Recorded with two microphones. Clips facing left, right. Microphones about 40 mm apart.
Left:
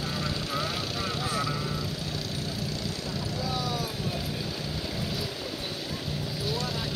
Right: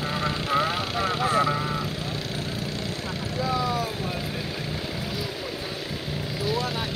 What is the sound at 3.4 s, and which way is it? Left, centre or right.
Vehicle, right.